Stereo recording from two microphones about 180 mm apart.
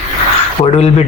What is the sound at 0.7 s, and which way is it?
Speech, 35° left (ahead or behind).